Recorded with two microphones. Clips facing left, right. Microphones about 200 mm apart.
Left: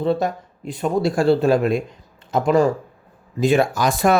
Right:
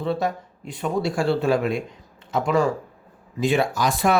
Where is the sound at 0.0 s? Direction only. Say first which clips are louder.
Left 4 dB; 40° left (ahead or behind).